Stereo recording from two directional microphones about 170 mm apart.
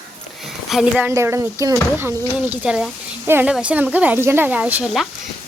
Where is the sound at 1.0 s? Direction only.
15° right (ahead or behind).